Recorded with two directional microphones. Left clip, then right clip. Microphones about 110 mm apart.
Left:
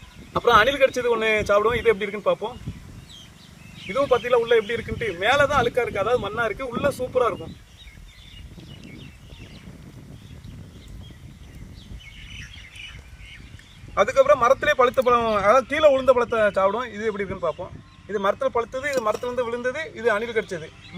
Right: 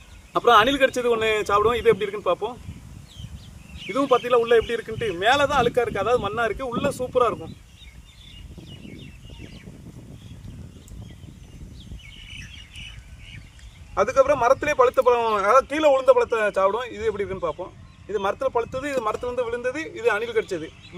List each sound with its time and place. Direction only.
0.3 s a man's voice: 50° right (ahead or behind)
3.8 s speech: 50° right (ahead or behind); by 7.3 s 65° right (ahead or behind)
13.9 s a man's voice: 20° right (ahead or behind)
14.6 s a man's voice: 35° right (ahead or behind)
18.1 s speech: 30° right (ahead or behind)